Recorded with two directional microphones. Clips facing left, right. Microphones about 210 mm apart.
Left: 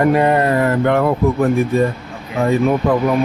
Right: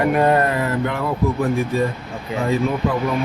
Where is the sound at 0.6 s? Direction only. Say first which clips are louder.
Left 7 dB; 60° left (ahead or behind).